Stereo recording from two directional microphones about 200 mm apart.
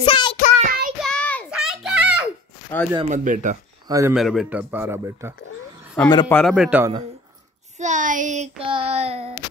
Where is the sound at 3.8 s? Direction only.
15° right (ahead or behind).